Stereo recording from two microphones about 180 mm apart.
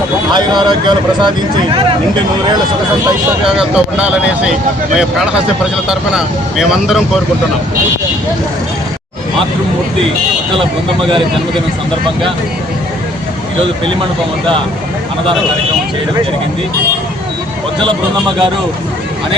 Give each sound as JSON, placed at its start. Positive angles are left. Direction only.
{"t": 0.3, "sound": "speech", "side_deg": -25}
{"t": 3.6, "sound": "speech", "side_deg": -5}